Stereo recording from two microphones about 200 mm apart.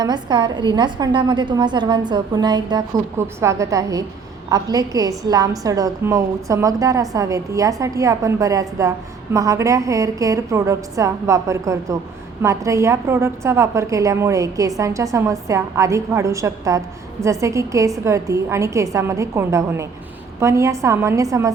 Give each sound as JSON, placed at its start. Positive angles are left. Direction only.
{"t": 0.0, "sound": "a woman's voice", "side_deg": -20}